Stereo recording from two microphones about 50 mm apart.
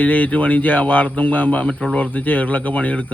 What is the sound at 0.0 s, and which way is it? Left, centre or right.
Speech, left.